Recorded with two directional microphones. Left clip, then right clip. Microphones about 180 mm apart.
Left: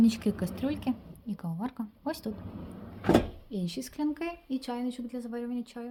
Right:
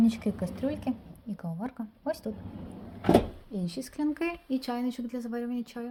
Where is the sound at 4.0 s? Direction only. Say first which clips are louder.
Right 3 dB; 15° right (ahead or behind).